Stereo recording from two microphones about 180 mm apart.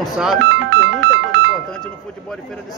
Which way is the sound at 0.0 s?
Centre (ahead or behind).